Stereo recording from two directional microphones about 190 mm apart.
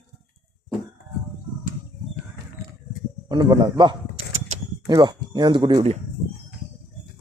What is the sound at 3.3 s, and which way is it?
A man's voice, 20° right (ahead or behind).